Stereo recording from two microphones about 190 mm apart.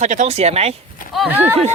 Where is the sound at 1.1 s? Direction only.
Centre (ahead or behind).